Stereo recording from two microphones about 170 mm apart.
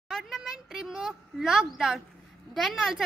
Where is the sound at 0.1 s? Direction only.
Centre (ahead or behind).